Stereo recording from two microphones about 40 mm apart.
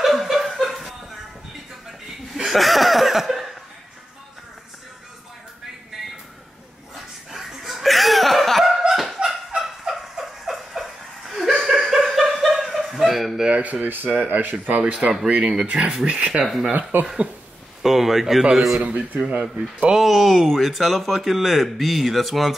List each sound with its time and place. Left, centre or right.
0.0 s chuckle: centre
7.2 s a sound: centre
8.9 s fowl: centre
9.6 s turkey: centre
11.9 s chuckle: centre
13.5 s a sound: right
14.1 s a man's voice: right
14.4 s speech: right
15.0 s speech: centre
16.9 s speech: right
17.8 s speech: centre
18.8 s a man's voice: right
19.9 s speech: centre